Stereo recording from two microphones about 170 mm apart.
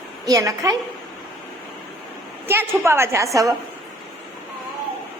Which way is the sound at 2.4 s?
15° right (ahead or behind).